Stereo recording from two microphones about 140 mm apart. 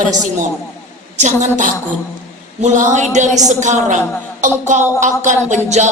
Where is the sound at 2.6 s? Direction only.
60° right (ahead or behind).